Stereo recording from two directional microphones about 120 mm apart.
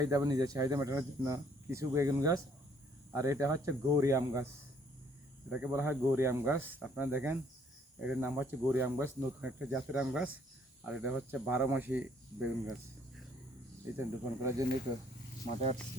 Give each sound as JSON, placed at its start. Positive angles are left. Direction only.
{"t": 0.0, "sound": "speech", "side_deg": -30}
{"t": 5.5, "sound": "speech", "side_deg": -15}
{"t": 13.9, "sound": "speech", "side_deg": -20}